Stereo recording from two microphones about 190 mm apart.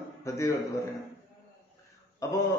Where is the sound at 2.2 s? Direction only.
15° left (ahead or behind).